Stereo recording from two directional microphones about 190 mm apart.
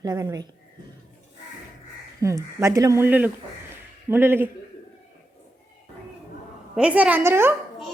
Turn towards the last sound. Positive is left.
turn(degrees=-10)  # may be behind; listen again after turning